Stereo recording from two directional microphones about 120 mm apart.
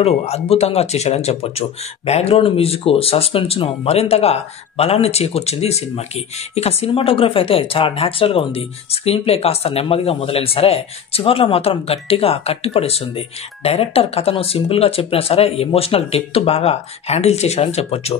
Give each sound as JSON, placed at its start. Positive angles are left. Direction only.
{"t": 0.0, "sound": "speech", "side_deg": 60}
{"t": 6.9, "sound": "speech", "side_deg": 50}